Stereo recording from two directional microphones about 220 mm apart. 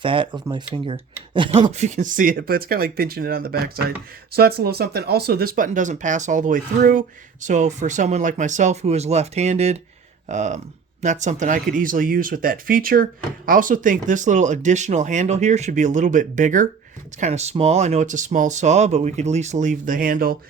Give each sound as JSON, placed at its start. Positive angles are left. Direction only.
{"t": 0.0, "sound": "speech", "side_deg": -25}